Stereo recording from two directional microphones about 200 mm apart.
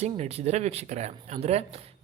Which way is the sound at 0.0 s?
30° right (ahead or behind).